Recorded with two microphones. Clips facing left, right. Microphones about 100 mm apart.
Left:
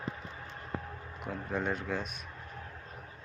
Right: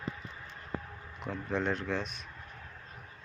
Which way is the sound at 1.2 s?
10° left (ahead or behind).